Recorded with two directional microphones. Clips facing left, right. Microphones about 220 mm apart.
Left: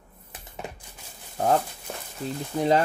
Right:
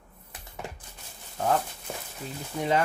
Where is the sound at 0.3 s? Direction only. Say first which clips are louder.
Left 2 dB; 20° left (ahead or behind).